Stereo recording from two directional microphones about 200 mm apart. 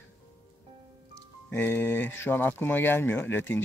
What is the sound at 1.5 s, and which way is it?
Speech, 10° left (ahead or behind).